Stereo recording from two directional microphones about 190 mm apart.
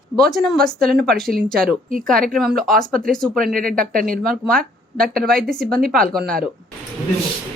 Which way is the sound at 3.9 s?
50° right (ahead or behind).